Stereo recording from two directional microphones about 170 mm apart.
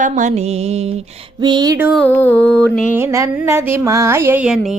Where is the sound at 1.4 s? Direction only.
25° right (ahead or behind).